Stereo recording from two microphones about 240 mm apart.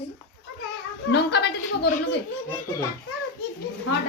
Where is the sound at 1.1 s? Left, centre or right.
Left.